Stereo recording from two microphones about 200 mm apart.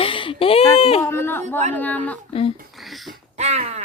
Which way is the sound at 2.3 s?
30° left (ahead or behind).